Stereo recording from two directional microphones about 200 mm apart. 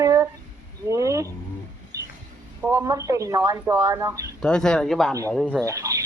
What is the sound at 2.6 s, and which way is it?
Speech, 10° right (ahead or behind).